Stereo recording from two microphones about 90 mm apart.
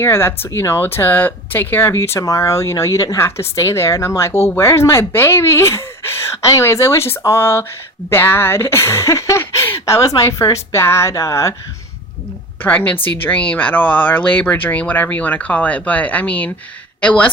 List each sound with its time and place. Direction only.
0.0 s speech: 25° left (ahead or behind)
12.6 s speech: 15° left (ahead or behind)